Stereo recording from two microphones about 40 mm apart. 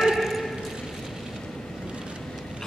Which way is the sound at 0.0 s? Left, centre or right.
Centre.